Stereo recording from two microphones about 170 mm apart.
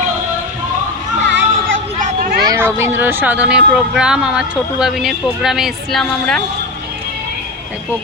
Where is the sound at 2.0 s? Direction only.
50° right (ahead or behind).